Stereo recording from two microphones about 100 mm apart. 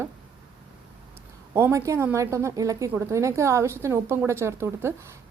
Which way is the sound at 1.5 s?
30° right (ahead or behind).